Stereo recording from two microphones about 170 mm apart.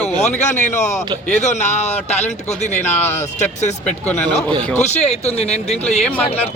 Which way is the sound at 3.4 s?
40° left (ahead or behind).